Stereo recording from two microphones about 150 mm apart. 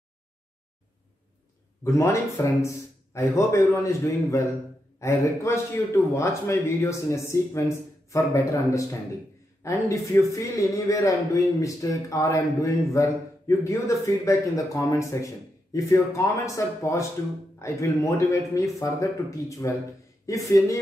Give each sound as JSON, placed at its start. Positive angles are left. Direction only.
{"t": 1.9, "sound": "a man's voice", "side_deg": 20}